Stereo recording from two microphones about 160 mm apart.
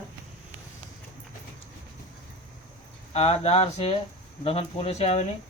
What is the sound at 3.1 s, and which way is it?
Speech, 40° left (ahead or behind).